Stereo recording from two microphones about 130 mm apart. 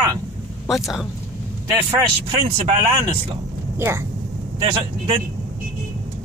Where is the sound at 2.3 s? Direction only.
45° right (ahead or behind).